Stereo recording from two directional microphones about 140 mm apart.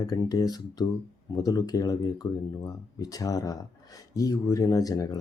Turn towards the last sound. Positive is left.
turn(degrees=25)  # may be behind; listen again after turning